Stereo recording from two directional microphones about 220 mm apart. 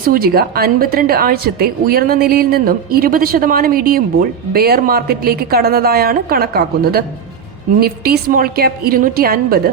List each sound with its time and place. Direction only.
0.1 s a woman's voice: 45° right (ahead or behind)